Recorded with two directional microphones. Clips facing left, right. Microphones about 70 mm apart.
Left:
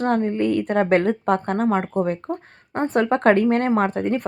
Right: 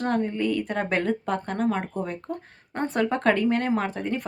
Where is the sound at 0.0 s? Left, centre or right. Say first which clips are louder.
Left 5 dB; left.